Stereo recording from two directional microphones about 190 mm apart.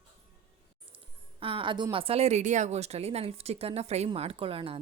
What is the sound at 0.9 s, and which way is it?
Speech, 25° right (ahead or behind).